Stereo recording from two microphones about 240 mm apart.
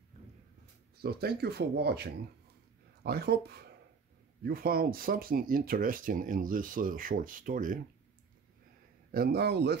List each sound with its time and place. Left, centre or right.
1.0 s speech: right
9.1 s speech: right